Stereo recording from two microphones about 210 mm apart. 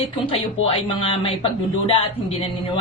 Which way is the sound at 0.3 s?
25° left (ahead or behind).